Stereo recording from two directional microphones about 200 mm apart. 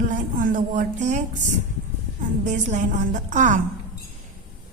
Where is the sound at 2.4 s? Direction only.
35° right (ahead or behind).